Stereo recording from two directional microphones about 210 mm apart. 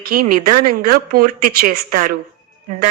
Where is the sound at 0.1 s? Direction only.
45° right (ahead or behind).